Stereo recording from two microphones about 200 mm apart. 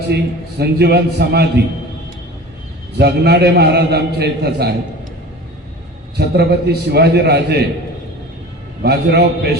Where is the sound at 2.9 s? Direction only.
55° right (ahead or behind).